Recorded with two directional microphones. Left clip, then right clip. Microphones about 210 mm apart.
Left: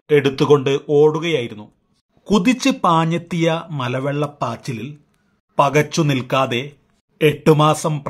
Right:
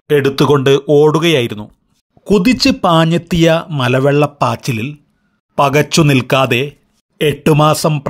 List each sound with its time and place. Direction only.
0.1 s speech: 25° right (ahead or behind)